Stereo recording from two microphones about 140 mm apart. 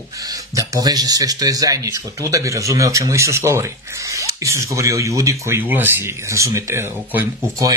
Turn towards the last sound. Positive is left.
turn(degrees=-20)  # may be behind; listen again after turning